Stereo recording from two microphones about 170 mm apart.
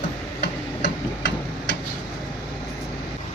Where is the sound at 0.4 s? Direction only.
90° left.